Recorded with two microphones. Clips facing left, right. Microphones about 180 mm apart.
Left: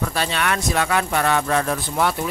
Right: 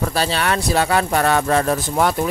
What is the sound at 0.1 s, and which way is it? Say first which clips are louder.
Speech: right 3 dB; 35° right (ahead or behind).